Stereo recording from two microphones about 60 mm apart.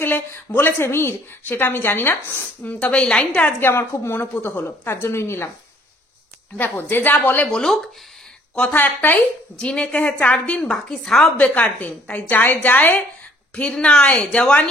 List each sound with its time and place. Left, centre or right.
0.0 s a sound: left
0.6 s speech: left
2.4 s a woman's voice: left
3.6 s a woman's voice: left
6.6 s speech: left
7.4 s speech: centre
8.7 s speech: left
9.6 s a woman's voice: centre
10.7 s a woman's voice: centre
11.3 s a woman's voice: left